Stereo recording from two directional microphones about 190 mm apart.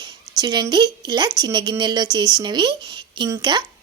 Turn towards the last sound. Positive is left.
turn(degrees=-25)  # may be behind; listen again after turning